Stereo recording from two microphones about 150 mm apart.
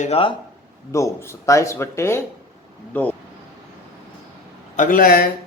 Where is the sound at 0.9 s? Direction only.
20° left (ahead or behind).